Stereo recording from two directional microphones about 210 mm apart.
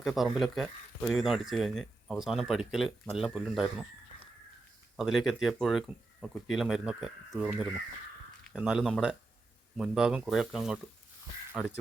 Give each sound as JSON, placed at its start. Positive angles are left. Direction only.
{"t": 0.0, "sound": "speech", "side_deg": 0}
{"t": 4.9, "sound": "speech", "side_deg": 0}